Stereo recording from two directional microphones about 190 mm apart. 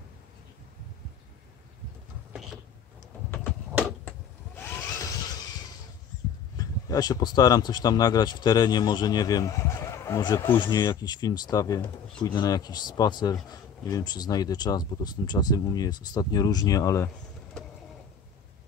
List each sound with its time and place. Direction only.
4.6 s vehicle: 10° left (ahead or behind)
6.5 s speech: 20° left (ahead or behind)